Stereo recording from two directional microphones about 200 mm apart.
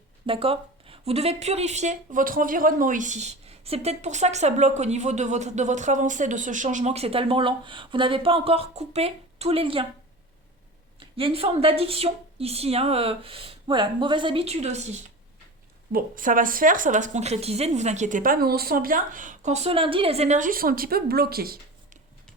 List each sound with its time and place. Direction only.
0.3 s a woman's voice: 25° right (ahead or behind)
11.0 s speech: 25° right (ahead or behind)
15.9 s a woman's voice: 45° right (ahead or behind)